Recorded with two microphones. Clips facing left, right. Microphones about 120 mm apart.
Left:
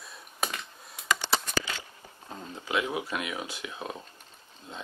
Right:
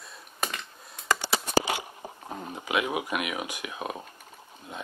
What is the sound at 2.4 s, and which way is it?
Speech, 65° right (ahead or behind).